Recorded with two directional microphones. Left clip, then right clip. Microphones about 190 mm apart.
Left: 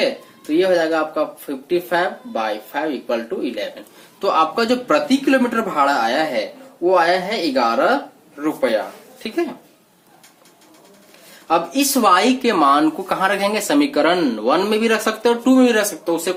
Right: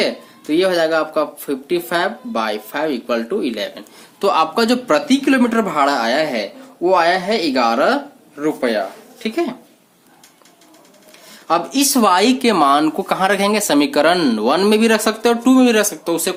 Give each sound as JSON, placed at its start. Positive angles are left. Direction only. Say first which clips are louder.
{"t": 0.5, "sound": "speech", "louder": "right 1 dB", "side_deg": -60}
{"t": 11.4, "sound": "speech", "louder": "right 1 dB", "side_deg": -55}